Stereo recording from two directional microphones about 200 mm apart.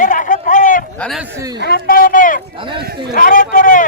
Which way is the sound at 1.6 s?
50° left (ahead or behind).